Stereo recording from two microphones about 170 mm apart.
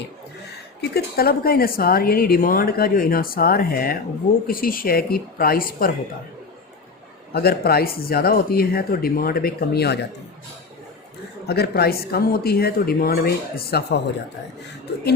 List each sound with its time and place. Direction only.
0.8 s a woman's voice: 65° left (ahead or behind)
7.3 s a woman's voice: 65° left (ahead or behind)
11.4 s a woman's voice: 70° left (ahead or behind)